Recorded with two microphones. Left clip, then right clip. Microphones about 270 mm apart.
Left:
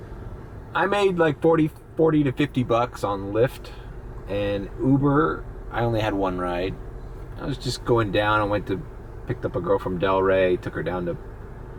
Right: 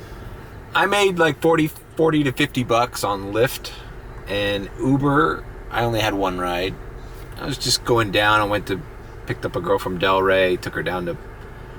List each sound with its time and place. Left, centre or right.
0.7 s speech: centre
4.8 s speech: left
5.7 s speech: centre